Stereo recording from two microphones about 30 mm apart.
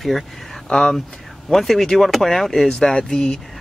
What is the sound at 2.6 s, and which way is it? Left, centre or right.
Speech, left.